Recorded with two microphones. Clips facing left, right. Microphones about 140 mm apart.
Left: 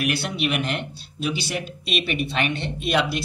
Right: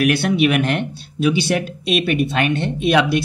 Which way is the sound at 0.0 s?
55° right (ahead or behind).